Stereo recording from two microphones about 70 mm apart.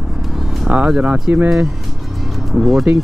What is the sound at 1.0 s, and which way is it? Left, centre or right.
Speech, right.